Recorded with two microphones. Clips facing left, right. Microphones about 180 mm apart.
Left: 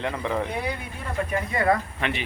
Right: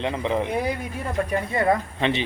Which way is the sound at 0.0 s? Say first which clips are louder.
Right 3 dB; 20° right (ahead or behind).